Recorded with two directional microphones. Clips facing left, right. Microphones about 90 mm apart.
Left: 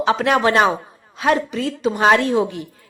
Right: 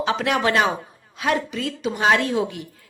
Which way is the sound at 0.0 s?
40° left (ahead or behind).